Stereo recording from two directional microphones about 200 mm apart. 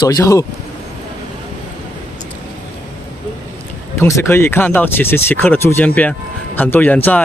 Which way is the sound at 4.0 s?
15° left (ahead or behind).